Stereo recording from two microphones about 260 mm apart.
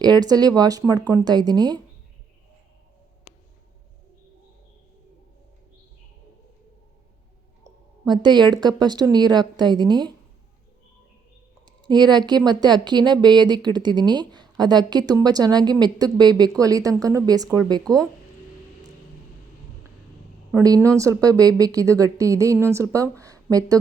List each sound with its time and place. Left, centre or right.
0.0 s a woman's voice: centre
7.6 s a woman's voice: centre
11.6 s a sound: centre
12.5 s a woman's voice: centre
20.5 s a woman's voice: centre